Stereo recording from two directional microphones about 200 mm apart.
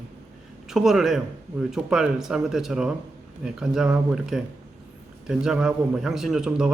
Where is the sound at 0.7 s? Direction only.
Centre (ahead or behind).